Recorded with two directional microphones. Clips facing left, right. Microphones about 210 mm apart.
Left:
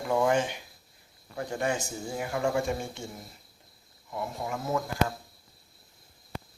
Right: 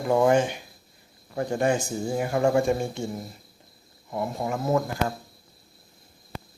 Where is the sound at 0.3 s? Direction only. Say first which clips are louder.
Right 5 dB; 45° right (ahead or behind).